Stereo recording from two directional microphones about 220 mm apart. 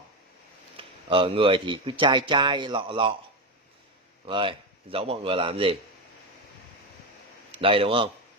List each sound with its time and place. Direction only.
0.7 s speech: 25° right (ahead or behind)
4.3 s speech: 25° right (ahead or behind)
7.5 s speech: 25° right (ahead or behind)